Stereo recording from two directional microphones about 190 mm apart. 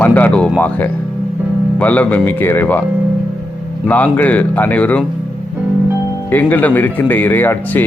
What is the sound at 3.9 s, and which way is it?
Speech, 10° left (ahead or behind).